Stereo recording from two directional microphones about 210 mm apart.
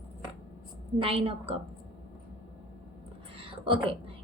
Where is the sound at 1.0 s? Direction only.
25° right (ahead or behind).